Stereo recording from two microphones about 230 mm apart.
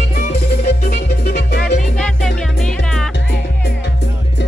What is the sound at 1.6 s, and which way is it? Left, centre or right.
Music, centre.